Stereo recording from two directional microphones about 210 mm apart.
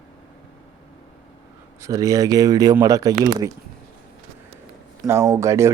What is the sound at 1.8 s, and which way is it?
Speech, 15° right (ahead or behind).